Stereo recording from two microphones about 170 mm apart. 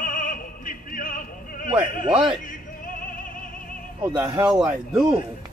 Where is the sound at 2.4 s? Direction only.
50° left (ahead or behind).